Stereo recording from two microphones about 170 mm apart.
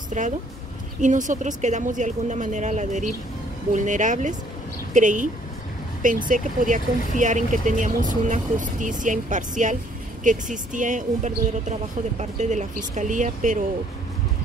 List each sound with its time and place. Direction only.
0.2 s speech: 50° right (ahead or behind)